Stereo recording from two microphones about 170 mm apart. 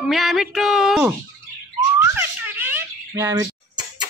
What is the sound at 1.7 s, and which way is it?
Whistling, 15° right (ahead or behind).